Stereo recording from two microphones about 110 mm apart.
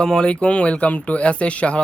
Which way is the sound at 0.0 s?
5° left (ahead or behind).